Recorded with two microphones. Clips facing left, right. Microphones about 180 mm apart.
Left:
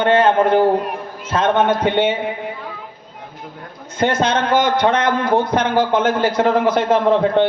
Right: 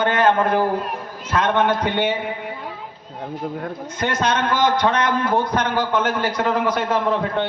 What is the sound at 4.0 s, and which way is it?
A man's voice, 25° left (ahead or behind).